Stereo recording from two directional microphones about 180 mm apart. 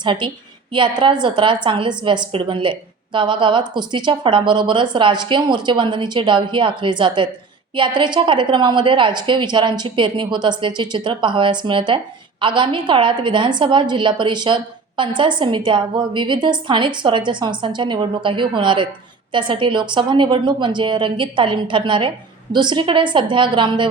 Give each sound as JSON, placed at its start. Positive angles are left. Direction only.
{"t": 0.0, "sound": "a woman's voice", "side_deg": -25}